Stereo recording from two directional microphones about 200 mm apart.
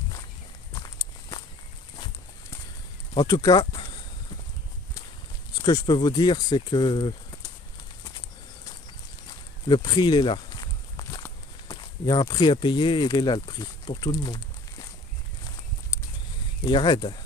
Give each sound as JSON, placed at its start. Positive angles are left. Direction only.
{"t": 0.7, "sound": "walk", "side_deg": 20}
{"t": 3.2, "sound": "speech", "side_deg": 20}
{"t": 5.6, "sound": "speech", "side_deg": 20}
{"t": 9.7, "sound": "speech", "side_deg": 20}
{"t": 16.6, "sound": "speech", "side_deg": 20}